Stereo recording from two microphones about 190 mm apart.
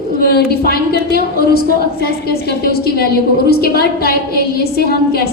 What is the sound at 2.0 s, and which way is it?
A woman's voice, 55° left (ahead or behind).